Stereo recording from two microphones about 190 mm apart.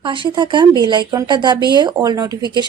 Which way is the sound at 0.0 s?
25° right (ahead or behind).